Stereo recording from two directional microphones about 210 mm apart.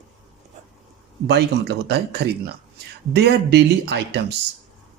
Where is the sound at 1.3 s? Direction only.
50° right (ahead or behind).